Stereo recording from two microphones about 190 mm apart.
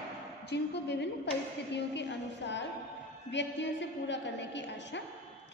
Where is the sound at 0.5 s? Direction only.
65° left (ahead or behind).